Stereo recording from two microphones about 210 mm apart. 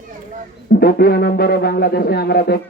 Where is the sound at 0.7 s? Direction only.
50° left (ahead or behind).